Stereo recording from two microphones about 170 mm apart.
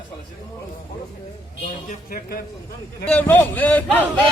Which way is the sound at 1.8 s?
60° left (ahead or behind).